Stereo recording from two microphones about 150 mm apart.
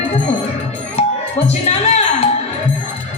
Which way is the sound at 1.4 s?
45° left (ahead or behind).